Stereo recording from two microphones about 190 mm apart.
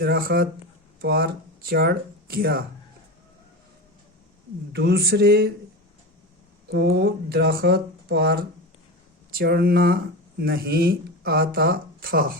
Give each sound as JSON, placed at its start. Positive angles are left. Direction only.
{"t": 0.0, "sound": "speech", "side_deg": -55}
{"t": 4.7, "sound": "speech", "side_deg": -55}
{"t": 6.7, "sound": "speech", "side_deg": -60}